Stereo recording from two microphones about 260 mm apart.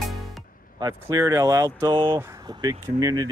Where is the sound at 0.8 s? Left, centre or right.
Centre.